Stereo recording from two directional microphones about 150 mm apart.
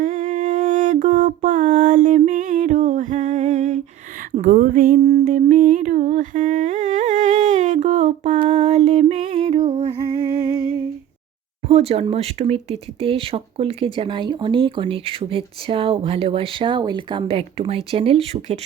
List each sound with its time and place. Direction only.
0.0 s music: 60° right (ahead or behind)
4.4 s a sound: 65° right (ahead or behind)
5.2 s humming: 55° right (ahead or behind); by 10.0 s 35° right (ahead or behind)
11.7 s speech: 45° right (ahead or behind)